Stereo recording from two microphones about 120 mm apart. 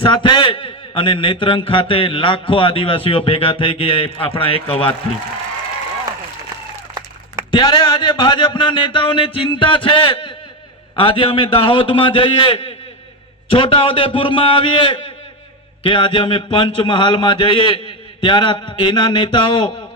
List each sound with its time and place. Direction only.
0.0 s a man's voice: 45° left (ahead or behind)
7.5 s a man's voice: 40° left (ahead or behind)